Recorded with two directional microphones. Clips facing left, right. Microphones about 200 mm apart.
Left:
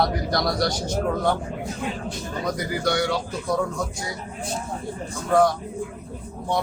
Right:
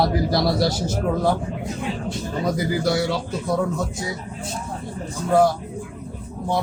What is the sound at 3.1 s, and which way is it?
Speech, 25° right (ahead or behind).